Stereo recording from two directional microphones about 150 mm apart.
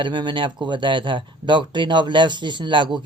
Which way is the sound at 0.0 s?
30° right (ahead or behind).